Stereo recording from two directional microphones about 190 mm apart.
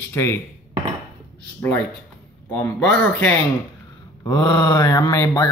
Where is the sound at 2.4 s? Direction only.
10° left (ahead or behind).